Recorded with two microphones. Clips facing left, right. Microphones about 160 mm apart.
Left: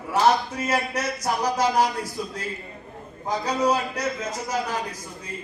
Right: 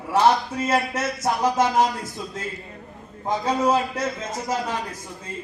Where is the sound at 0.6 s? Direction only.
25° right (ahead or behind).